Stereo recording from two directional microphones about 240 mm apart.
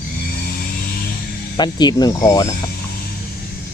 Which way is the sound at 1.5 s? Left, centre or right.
Centre.